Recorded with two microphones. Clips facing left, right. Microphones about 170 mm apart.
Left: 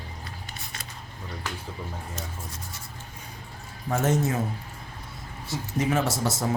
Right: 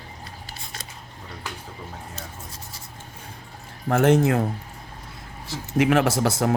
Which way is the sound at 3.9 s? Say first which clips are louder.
Right 7 dB; 70° right (ahead or behind).